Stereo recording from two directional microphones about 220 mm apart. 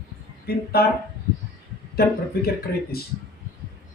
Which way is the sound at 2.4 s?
45° left (ahead or behind).